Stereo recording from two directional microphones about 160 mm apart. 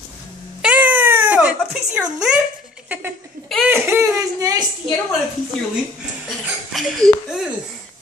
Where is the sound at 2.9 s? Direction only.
15° right (ahead or behind).